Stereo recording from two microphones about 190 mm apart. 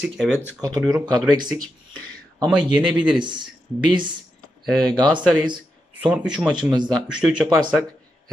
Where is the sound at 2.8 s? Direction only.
5° right (ahead or behind).